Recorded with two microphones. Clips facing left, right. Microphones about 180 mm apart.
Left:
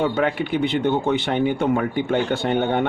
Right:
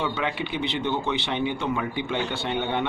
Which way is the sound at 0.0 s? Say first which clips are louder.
Left 7 dB; 45° left (ahead or behind).